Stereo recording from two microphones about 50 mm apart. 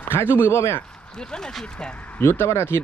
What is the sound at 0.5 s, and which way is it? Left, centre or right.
Speech, left.